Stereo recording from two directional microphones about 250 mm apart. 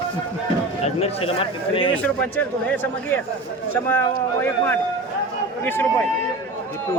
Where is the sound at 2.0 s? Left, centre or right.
Centre.